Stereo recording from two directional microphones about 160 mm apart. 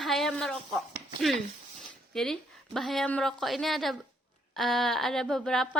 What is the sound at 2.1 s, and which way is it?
Speech, 5° left (ahead or behind).